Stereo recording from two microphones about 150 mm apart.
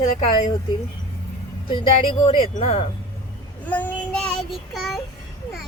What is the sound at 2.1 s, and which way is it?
Speech, 30° left (ahead or behind).